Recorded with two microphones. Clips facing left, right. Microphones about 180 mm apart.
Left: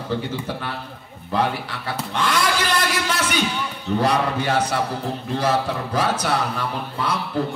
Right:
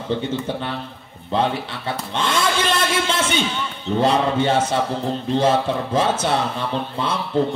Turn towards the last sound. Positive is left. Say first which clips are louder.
# right 3 dB
turn(degrees=-25)  # may be behind; listen again after turning